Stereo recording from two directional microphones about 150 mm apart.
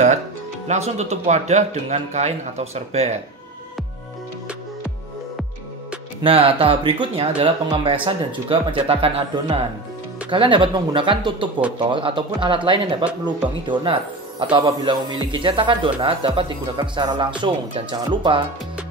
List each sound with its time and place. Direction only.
0.7 s a man's voice: 45° right (ahead or behind)
6.2 s speech: 40° right (ahead or behind)